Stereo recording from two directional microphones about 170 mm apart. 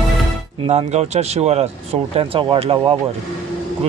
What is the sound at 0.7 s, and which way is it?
Speech, 40° right (ahead or behind).